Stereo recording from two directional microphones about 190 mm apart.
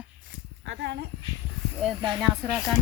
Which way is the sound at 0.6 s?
70° right (ahead or behind).